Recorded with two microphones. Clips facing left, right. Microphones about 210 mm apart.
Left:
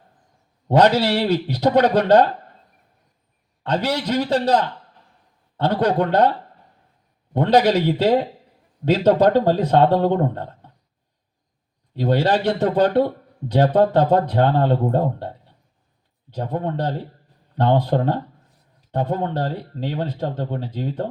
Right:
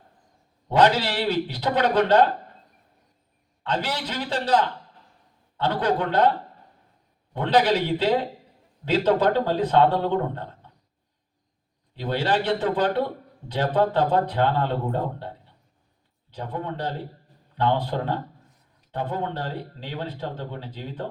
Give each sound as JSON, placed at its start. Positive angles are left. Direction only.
{"t": 0.8, "sound": "speech", "side_deg": 40}
{"t": 3.8, "sound": "speech", "side_deg": 40}
{"t": 5.6, "sound": "speech", "side_deg": 40}
{"t": 7.3, "sound": "speech", "side_deg": 40}
{"t": 11.9, "sound": "speech", "side_deg": 45}
{"t": 16.3, "sound": "speech", "side_deg": 45}